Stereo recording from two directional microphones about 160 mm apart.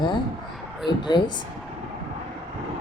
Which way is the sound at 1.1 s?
30° left (ahead or behind).